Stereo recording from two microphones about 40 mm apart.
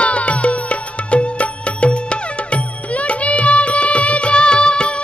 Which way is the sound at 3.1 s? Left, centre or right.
Left.